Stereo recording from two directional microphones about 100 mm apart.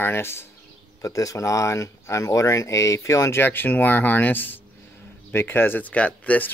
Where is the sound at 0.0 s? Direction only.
25° left (ahead or behind).